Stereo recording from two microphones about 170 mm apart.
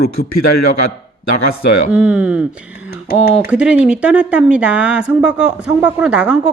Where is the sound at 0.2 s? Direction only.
70° left (ahead or behind).